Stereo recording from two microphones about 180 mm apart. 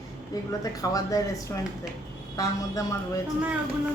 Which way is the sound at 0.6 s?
20° left (ahead or behind).